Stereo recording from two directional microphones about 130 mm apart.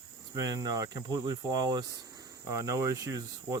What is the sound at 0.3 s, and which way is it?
Speech, 30° right (ahead or behind).